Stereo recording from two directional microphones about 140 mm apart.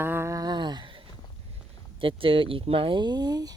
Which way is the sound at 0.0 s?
15° right (ahead or behind).